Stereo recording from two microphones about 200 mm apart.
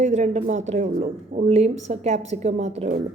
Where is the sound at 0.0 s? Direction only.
35° right (ahead or behind).